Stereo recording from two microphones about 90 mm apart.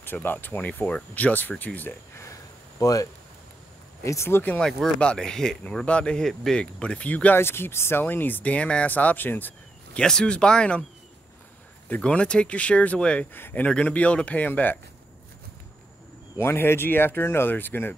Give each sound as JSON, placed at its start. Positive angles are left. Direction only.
{"t": 0.0, "sound": "speech", "side_deg": 20}
{"t": 2.8, "sound": "speech", "side_deg": 40}
{"t": 4.5, "sound": "speech", "side_deg": 5}
{"t": 9.9, "sound": "speech", "side_deg": 10}
{"t": 11.9, "sound": "speech", "side_deg": 15}
{"t": 16.3, "sound": "speech", "side_deg": 25}